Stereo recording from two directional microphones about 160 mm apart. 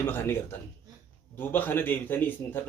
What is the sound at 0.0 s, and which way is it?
A man's voice, 15° left (ahead or behind).